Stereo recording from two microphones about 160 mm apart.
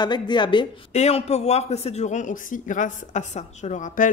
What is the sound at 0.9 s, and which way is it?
A man's voice, 40° left (ahead or behind).